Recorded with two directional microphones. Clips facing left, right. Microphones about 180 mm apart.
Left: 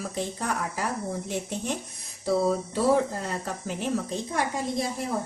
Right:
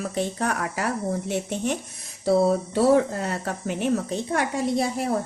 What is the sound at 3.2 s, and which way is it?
A woman's voice, 65° right (ahead or behind).